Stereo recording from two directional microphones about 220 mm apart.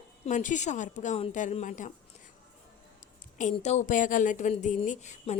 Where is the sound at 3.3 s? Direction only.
30° left (ahead or behind).